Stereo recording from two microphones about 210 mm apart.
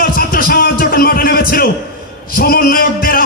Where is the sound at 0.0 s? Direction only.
45° left (ahead or behind).